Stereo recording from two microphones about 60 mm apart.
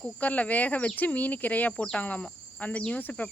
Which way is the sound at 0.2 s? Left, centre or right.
Left.